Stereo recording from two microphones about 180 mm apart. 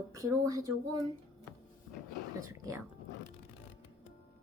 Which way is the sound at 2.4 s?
15° right (ahead or behind).